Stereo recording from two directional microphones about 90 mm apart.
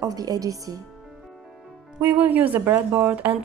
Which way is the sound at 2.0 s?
20° right (ahead or behind).